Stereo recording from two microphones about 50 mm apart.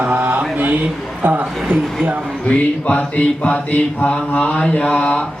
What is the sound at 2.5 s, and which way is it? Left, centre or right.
Mantra, left.